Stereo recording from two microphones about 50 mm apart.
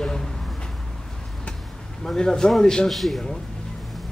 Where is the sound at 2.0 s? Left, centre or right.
Centre.